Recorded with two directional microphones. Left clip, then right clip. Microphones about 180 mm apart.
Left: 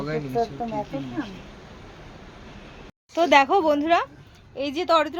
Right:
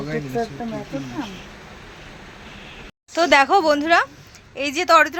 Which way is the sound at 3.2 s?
5° left (ahead or behind).